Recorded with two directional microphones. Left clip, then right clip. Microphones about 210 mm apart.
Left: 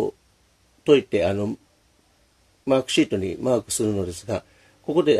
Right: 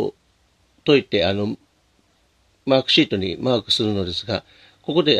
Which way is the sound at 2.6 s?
40° right (ahead or behind).